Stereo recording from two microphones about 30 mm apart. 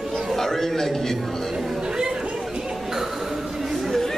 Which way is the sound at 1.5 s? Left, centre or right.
Centre.